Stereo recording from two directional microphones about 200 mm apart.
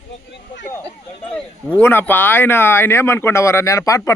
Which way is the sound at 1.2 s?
5° left (ahead or behind).